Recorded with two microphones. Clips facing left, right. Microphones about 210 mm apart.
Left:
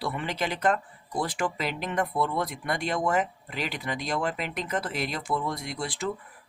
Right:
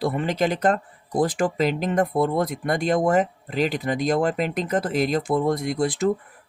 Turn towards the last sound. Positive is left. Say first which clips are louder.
# right 10 dB
turn(degrees=-45)  # may be behind; listen again after turning